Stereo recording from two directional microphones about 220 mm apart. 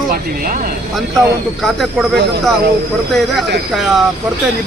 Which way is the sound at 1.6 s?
Centre (ahead or behind).